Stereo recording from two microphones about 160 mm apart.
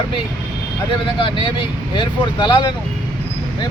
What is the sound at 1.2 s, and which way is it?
Speech, 30° left (ahead or behind).